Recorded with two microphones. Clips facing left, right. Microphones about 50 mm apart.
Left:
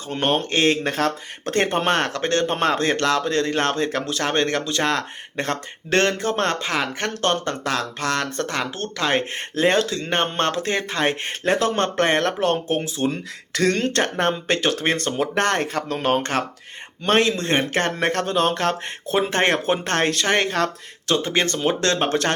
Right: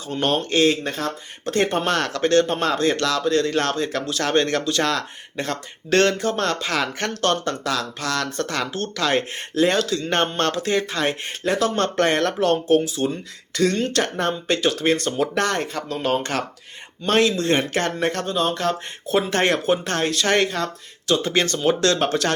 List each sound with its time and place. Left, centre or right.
0.2 s speech: left
0.9 s speech: left
1.5 s speech: left
6.7 s speech: left
10.1 s speech: left
10.5 s speech: left
11.7 s speech: left
13.6 s speech: left
17.9 s speech: left
19.1 s speech: left
19.8 s speech: left
20.2 s speech: left